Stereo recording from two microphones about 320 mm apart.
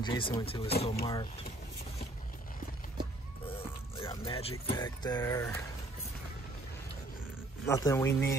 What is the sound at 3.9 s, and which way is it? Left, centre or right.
Music, centre.